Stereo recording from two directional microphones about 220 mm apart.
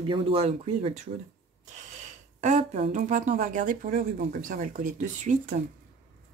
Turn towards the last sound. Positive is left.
turn(degrees=-35)  # may be behind; listen again after turning